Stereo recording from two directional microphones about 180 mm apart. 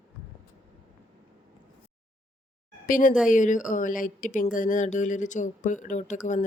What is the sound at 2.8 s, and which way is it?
A woman's voice, 50° left (ahead or behind).